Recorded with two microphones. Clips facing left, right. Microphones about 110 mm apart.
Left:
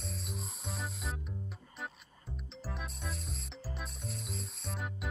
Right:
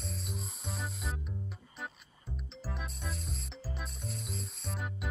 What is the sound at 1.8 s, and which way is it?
Music, centre (ahead or behind).